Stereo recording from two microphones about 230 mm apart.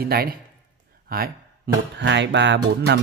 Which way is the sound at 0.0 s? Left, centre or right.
Right.